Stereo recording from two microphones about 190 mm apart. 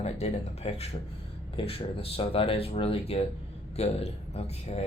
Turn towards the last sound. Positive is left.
turn(degrees=35)  # may be behind; listen again after turning